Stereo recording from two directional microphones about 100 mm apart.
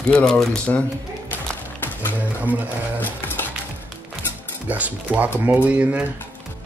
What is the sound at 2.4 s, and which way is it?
Speech, 15° right (ahead or behind).